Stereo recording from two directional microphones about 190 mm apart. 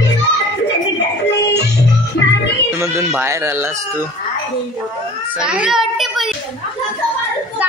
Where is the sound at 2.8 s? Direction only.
15° right (ahead or behind).